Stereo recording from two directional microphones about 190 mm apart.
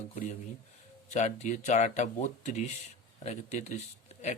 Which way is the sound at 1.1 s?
40° left (ahead or behind).